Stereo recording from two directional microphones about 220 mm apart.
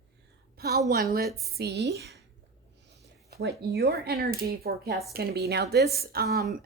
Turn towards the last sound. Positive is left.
turn(degrees=-45)  # may be behind; listen again after turning